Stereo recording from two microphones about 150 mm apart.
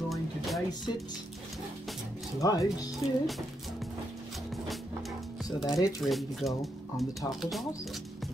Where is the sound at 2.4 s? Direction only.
25° left (ahead or behind).